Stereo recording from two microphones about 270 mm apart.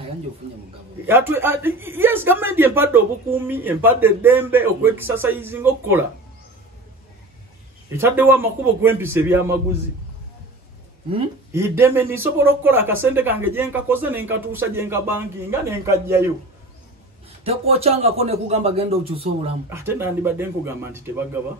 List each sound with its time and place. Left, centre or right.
1.0 s a man's voice: centre
8.0 s a man's voice: centre
11.5 s a man's voice: centre
17.5 s speech: right
19.7 s a man's voice: centre